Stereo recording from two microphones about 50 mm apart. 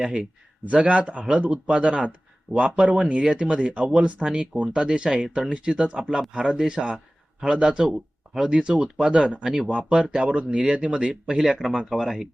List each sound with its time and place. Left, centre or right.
0.0 s speech: right
11.9 s speech: centre